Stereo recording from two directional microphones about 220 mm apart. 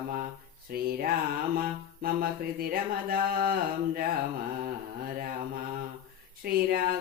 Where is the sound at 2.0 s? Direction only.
40° right (ahead or behind).